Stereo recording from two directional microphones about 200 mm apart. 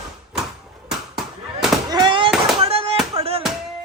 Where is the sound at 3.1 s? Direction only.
30° right (ahead or behind).